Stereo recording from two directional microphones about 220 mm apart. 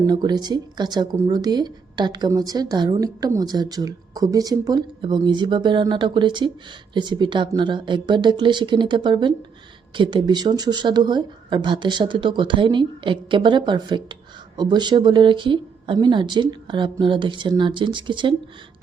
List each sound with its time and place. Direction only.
0.1 s speech: 20° right (ahead or behind)